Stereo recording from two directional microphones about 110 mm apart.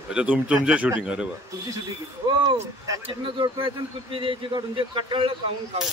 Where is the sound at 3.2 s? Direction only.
50° right (ahead or behind).